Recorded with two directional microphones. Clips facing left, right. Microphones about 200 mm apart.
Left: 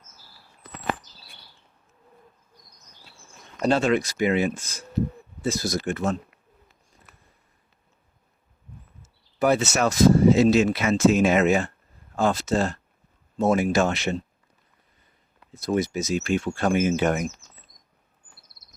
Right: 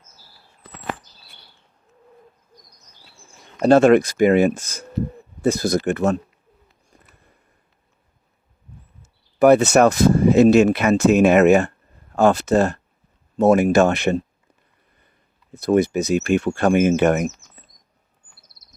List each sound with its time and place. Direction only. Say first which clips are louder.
3.7 s speech: right 9 dB; 55° right (ahead or behind)
6.9 s a sound: right 3 dB; 60° right (ahead or behind)
9.4 s speech: right 9 dB; 60° right (ahead or behind)
15.6 s speech: right 7 dB; 60° right (ahead or behind)